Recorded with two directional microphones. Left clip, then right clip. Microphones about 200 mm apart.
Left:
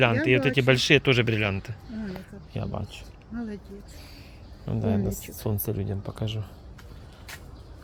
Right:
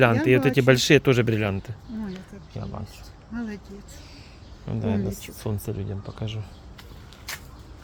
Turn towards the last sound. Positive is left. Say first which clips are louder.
# left 1 dB
turn(degrees=10)  # may be behind; listen again after turning